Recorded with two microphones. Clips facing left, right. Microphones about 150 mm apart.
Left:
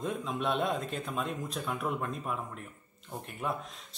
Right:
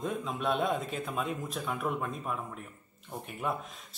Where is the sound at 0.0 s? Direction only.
Centre (ahead or behind).